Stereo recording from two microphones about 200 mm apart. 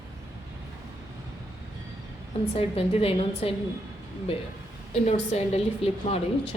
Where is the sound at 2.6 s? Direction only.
30° left (ahead or behind).